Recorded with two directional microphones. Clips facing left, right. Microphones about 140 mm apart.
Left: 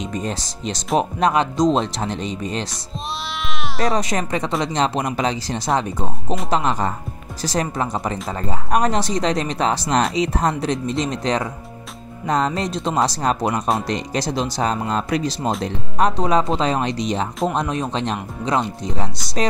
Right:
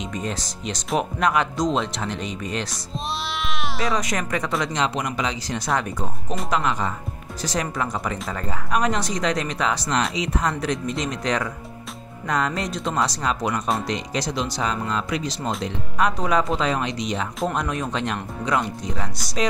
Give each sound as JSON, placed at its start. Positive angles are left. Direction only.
{"t": 0.1, "sound": "speech", "side_deg": 35}
{"t": 3.8, "sound": "speech", "side_deg": 30}
{"t": 8.6, "sound": "speech", "side_deg": 40}
{"t": 13.2, "sound": "speech", "side_deg": 40}
{"t": 16.2, "sound": "speech", "side_deg": 25}